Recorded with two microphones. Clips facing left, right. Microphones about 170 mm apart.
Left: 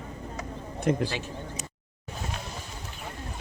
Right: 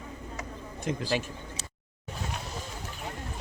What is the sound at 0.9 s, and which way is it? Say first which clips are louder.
Speech: left 7 dB; 60° left (ahead or behind).